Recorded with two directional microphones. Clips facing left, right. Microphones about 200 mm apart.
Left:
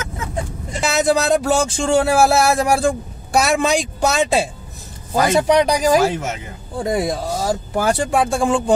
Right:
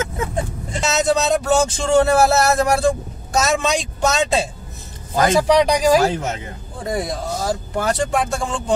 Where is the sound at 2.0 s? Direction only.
10° left (ahead or behind).